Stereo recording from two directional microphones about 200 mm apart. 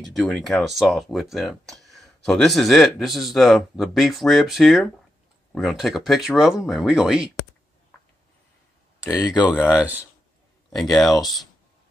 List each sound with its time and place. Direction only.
0.0 s speech: 5° left (ahead or behind)
9.2 s speech: 20° left (ahead or behind)
9.7 s speech: 5° right (ahead or behind)